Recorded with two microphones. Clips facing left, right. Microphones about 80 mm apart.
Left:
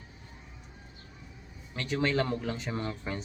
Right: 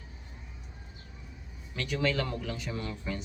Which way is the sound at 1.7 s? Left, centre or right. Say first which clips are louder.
Left 1 dB; left.